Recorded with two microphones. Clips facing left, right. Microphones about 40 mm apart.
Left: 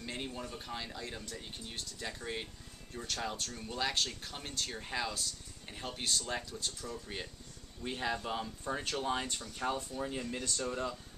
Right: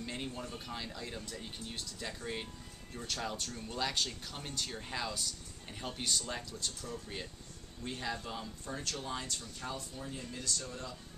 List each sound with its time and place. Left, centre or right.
0.0 s speech: centre; by 10.9 s left